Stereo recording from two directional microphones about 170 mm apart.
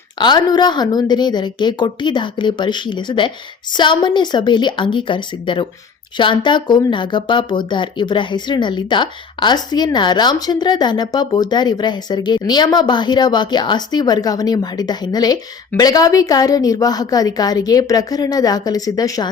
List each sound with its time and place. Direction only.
0.2 s speech: 25° left (ahead or behind)